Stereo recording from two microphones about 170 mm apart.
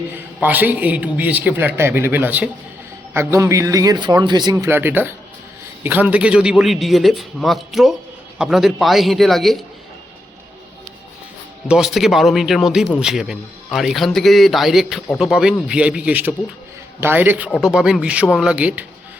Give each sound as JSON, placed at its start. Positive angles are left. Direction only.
{"t": 0.3, "sound": "a man's voice", "side_deg": -10}
{"t": 11.7, "sound": "a man's voice", "side_deg": 0}